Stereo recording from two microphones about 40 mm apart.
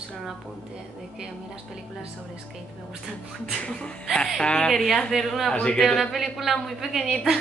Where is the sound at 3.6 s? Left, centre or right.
Left.